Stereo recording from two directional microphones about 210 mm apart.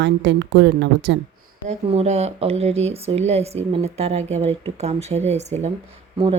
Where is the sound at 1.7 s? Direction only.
30° right (ahead or behind).